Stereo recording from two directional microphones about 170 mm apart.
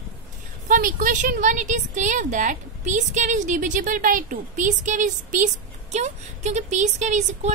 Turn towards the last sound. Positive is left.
turn(degrees=-45)  # may be behind; listen again after turning